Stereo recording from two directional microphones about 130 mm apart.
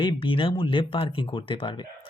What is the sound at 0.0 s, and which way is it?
Speech, 40° left (ahead or behind).